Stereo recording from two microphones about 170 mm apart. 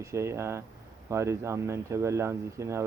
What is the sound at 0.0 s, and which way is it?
Speech, 15° right (ahead or behind).